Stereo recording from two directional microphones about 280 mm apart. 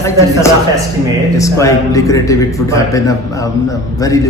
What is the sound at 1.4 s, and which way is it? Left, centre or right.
A man's voice, centre.